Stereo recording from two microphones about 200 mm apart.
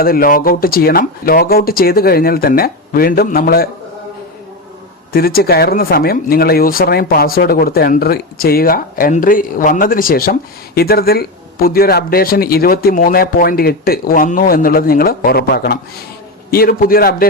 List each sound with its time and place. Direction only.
0.0 s speech: 45° left (ahead or behind)
5.1 s speech: 50° left (ahead or behind)